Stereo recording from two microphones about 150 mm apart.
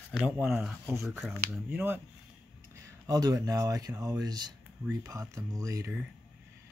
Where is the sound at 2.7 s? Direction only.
25° right (ahead or behind).